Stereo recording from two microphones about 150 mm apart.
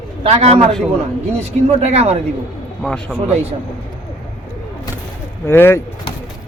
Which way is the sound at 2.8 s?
5° left (ahead or behind).